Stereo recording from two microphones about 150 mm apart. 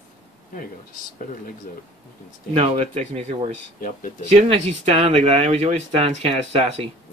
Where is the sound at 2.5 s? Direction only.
40° right (ahead or behind).